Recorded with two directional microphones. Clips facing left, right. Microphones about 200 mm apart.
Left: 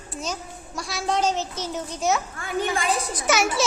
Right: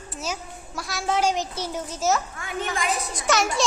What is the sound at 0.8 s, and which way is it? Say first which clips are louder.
A child's voice: even; centre (ahead or behind).